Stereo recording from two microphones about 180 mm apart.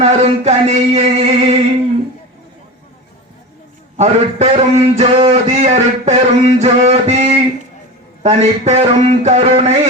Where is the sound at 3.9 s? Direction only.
40° right (ahead or behind).